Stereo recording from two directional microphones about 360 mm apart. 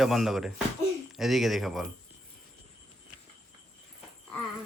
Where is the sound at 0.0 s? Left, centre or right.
Centre.